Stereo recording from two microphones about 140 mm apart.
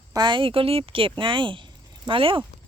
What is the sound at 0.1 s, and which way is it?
A woman's voice, 30° right (ahead or behind).